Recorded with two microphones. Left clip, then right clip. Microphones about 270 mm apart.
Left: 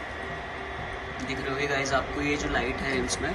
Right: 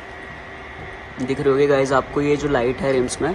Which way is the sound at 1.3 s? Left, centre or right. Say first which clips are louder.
Right 13 dB; centre.